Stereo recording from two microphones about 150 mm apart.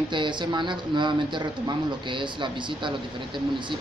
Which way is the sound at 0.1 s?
30° right (ahead or behind).